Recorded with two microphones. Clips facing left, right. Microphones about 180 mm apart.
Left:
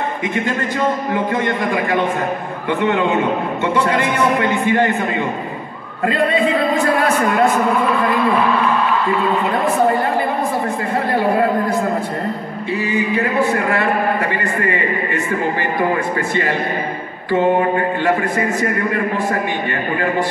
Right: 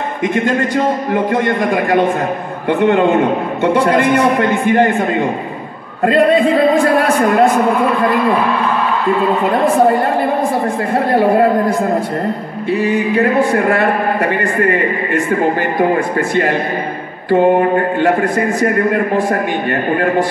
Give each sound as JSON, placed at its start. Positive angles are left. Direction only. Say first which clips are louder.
{"t": 1.1, "sound": "a man's voice", "louder": "right 4 dB", "side_deg": -55}
{"t": 12.7, "sound": "a man's voice", "louder": "right 5 dB", "side_deg": -55}
{"t": 17.3, "sound": "a man's voice", "louder": "right 4 dB", "side_deg": -55}
{"t": 18.3, "sound": "a man's voice", "louder": "right 4 dB", "side_deg": 0}